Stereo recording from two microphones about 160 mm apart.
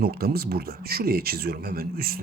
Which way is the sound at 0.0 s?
75° right (ahead or behind).